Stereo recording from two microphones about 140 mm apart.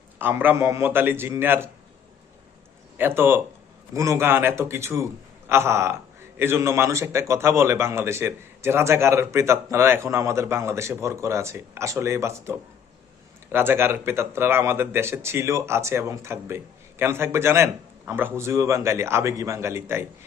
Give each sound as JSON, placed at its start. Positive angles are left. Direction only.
{"t": 0.2, "sound": "speech", "side_deg": -15}
{"t": 3.0, "sound": "a man's voice", "side_deg": -15}